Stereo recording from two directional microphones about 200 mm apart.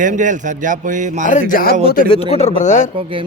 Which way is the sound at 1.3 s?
40° left (ahead or behind).